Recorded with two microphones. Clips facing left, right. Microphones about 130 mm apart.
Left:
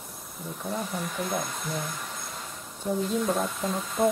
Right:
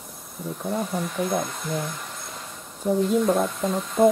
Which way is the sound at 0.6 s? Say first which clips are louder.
Right 5 dB; centre (ahead or behind).